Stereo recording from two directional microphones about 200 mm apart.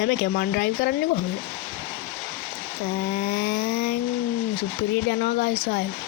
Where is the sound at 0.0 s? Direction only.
55° left (ahead or behind).